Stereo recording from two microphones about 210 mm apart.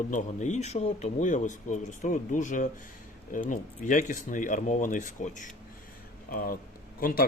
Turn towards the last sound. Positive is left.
turn(degrees=45)  # may be behind; listen again after turning